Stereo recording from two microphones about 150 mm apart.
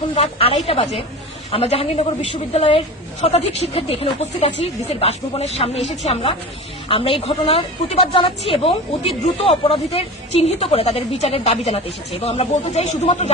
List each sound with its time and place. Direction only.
0.1 s a woman's voice: 40° left (ahead or behind)